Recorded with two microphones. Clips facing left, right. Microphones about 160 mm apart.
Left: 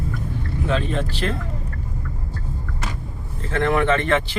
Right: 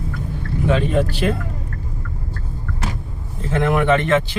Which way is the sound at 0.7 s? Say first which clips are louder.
Right 5 dB; 10° right (ahead or behind).